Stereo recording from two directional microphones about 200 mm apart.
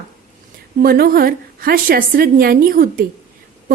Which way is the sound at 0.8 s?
50° right (ahead or behind).